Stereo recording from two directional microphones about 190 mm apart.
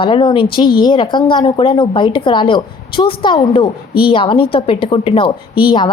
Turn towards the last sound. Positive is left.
turn(degrees=25)  # may be behind; listen again after turning